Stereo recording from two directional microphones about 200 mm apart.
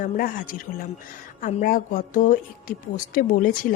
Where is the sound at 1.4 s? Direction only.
40° left (ahead or behind).